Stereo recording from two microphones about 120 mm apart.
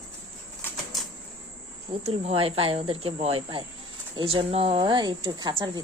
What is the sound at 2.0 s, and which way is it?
Speech, 55° right (ahead or behind).